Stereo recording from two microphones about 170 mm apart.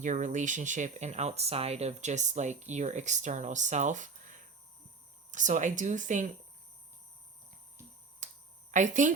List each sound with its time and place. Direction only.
0.0 s speech: 45° right (ahead or behind)
8.7 s speech: 45° right (ahead or behind)